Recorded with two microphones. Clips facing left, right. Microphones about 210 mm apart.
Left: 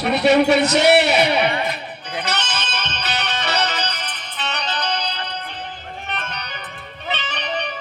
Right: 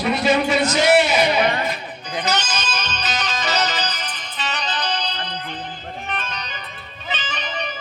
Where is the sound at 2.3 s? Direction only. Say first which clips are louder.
Right 2 dB; 60° left (ahead or behind).